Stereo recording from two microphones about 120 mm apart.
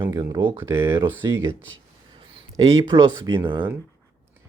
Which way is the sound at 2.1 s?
50° right (ahead or behind).